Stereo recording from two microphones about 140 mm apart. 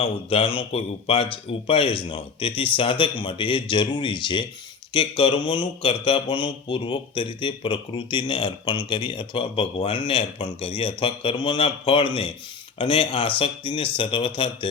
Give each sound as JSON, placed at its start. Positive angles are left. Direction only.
{"t": 0.0, "sound": "speech", "side_deg": 40}